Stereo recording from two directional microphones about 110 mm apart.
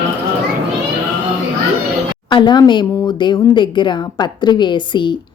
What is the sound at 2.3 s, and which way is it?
A woman's voice, 45° left (ahead or behind).